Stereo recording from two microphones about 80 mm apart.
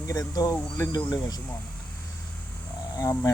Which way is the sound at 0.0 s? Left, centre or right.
Left.